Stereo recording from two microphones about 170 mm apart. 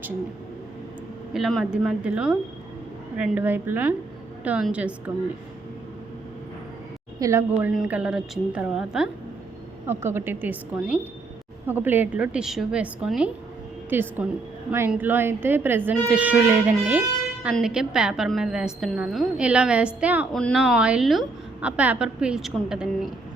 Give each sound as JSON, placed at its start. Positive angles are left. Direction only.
{"t": 1.3, "sound": "a woman's voice", "side_deg": 0}
{"t": 7.2, "sound": "a woman's voice", "side_deg": -15}
{"t": 7.7, "sound": "a woman's voice", "side_deg": -5}
{"t": 9.8, "sound": "a woman's voice", "side_deg": -15}
{"t": 20.3, "sound": "a woman's voice", "side_deg": 5}